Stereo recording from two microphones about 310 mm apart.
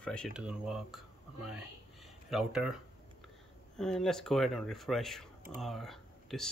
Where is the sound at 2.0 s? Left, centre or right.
Centre.